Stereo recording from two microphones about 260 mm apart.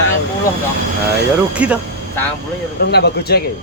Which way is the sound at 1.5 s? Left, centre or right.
Centre.